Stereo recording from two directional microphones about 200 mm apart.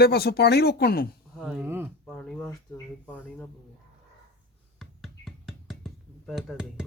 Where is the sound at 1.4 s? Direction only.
5° right (ahead or behind).